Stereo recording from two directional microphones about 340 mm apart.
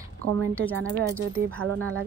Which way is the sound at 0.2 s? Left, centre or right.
Right.